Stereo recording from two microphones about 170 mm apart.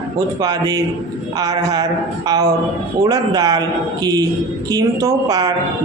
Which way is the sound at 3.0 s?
20° right (ahead or behind).